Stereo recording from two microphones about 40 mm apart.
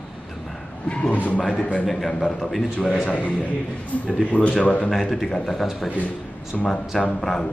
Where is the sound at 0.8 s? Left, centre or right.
Left.